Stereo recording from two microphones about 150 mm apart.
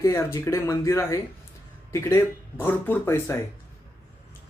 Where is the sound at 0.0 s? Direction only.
20° left (ahead or behind).